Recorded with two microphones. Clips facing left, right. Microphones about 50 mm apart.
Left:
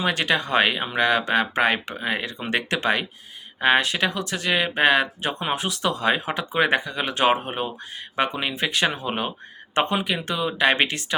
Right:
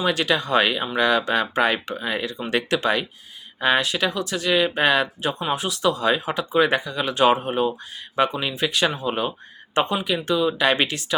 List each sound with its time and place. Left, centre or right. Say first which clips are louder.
0.0 s speech: right 1 dB; left